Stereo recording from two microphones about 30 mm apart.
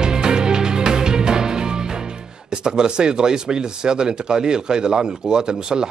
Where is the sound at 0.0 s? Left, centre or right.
Right.